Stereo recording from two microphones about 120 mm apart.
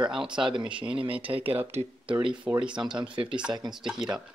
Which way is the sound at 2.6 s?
5° right (ahead or behind).